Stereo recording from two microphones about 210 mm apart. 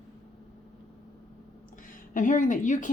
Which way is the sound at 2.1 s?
40° left (ahead or behind).